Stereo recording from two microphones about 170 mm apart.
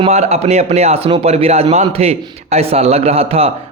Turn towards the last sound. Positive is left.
turn(degrees=-35)  # may be behind; listen again after turning